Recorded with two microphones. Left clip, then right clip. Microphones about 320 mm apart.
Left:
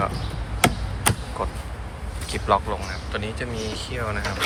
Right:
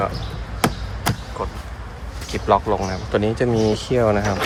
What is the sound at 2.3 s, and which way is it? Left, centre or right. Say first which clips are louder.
Speech: right 4 dB; centre.